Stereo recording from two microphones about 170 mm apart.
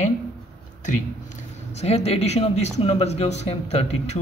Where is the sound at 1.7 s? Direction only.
40° left (ahead or behind).